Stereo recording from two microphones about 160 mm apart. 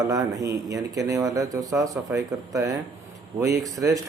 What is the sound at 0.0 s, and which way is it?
Speech, 20° right (ahead or behind).